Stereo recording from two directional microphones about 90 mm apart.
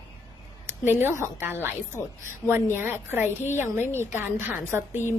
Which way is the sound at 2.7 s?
25° right (ahead or behind).